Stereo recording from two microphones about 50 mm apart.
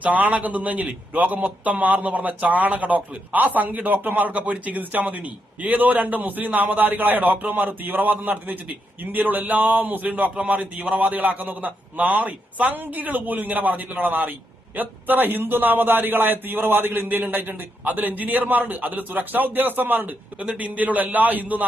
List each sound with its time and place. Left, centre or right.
0.0 s a man's voice: right